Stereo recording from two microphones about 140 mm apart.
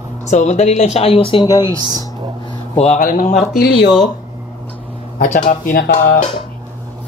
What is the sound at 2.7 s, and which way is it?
Speech, 50° left (ahead or behind).